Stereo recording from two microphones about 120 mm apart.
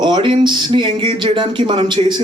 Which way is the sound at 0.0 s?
40° right (ahead or behind).